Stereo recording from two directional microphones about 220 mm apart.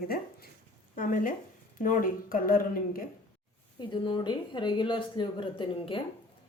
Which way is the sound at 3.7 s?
20° left (ahead or behind).